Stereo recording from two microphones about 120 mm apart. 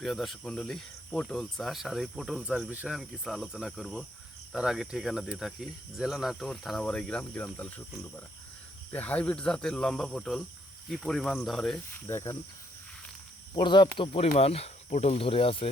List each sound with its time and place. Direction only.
0.0 s speech: centre (ahead or behind)
8.9 s speech: 15° left (ahead or behind)
12.0 s speech: 20° left (ahead or behind)
13.6 s speech: 40° left (ahead or behind)